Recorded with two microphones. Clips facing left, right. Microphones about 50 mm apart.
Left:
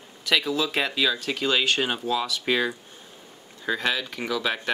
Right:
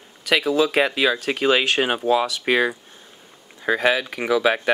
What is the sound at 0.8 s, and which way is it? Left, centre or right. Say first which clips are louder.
Speech: right 5 dB; right.